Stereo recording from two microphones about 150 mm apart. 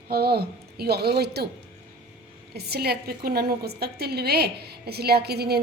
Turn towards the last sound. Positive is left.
turn(degrees=-90)